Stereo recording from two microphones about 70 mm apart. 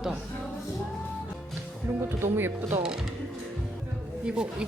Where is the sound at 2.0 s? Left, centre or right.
Right.